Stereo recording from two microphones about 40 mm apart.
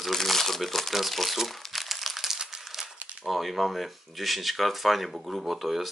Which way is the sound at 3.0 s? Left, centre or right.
Right.